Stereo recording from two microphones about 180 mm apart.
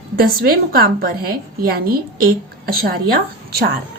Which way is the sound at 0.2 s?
55° right (ahead or behind).